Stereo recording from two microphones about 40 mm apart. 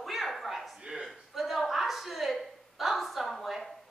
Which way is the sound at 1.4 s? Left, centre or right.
Centre.